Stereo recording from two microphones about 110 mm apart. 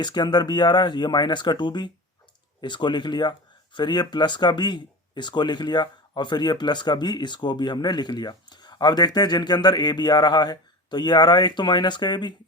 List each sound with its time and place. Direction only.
0.0 s speech: 40° left (ahead or behind)